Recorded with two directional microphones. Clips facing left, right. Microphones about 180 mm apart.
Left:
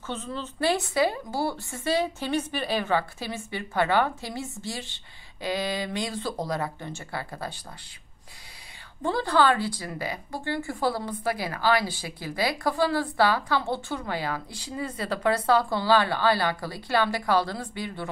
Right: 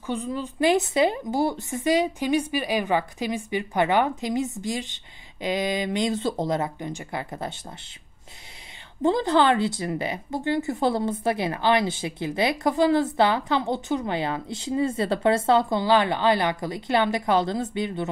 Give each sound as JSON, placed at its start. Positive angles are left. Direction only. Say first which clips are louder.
{"t": 0.0, "sound": "speech", "louder": "right 5 dB", "side_deg": -15}
{"t": 9.0, "sound": "speech", "louder": "right 3 dB", "side_deg": -20}